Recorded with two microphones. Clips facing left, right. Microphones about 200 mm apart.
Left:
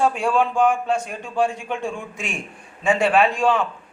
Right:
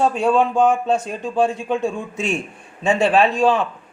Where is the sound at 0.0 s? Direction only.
20° right (ahead or behind).